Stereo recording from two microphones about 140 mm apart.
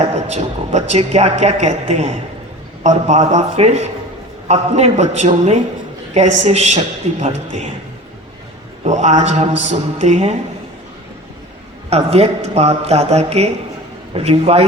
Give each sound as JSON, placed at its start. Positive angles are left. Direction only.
{"t": 0.0, "sound": "a woman's voice", "side_deg": -50}
{"t": 8.8, "sound": "a woman's voice", "side_deg": -55}
{"t": 11.9, "sound": "a woman's voice", "side_deg": -50}